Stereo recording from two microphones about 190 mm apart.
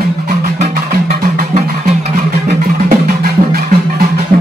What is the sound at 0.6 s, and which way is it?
Music, 40° right (ahead or behind).